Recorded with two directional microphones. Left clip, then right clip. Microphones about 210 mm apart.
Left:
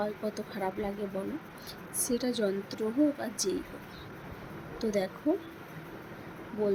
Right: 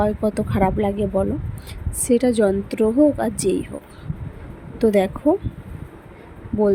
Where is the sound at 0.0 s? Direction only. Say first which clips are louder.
Right 13 dB; 35° right (ahead or behind).